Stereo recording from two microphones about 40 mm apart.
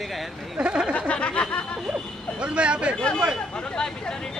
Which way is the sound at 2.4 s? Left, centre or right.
Right.